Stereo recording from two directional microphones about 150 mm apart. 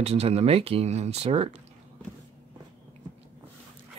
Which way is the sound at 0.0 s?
45° right (ahead or behind).